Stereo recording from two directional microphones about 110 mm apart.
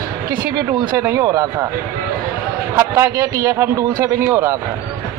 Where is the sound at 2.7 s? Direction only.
25° right (ahead or behind).